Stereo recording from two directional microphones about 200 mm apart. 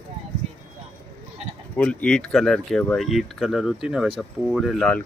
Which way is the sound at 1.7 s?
5° left (ahead or behind).